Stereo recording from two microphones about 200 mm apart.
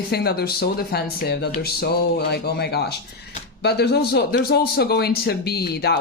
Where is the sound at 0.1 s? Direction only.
50° left (ahead or behind).